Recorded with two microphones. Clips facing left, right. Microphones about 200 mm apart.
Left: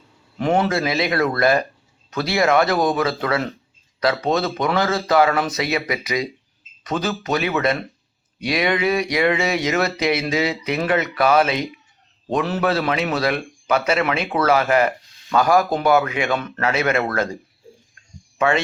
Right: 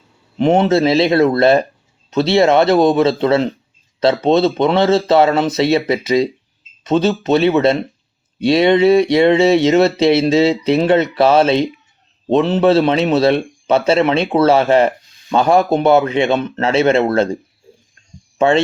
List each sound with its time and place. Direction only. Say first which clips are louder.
0.3 s speech: right 7 dB; 25° right (ahead or behind)
18.3 s speech: right 6 dB; 25° right (ahead or behind)